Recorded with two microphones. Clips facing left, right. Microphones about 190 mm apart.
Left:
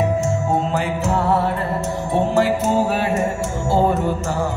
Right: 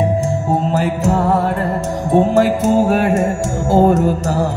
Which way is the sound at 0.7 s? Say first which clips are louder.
Right 4 dB; 45° right (ahead or behind).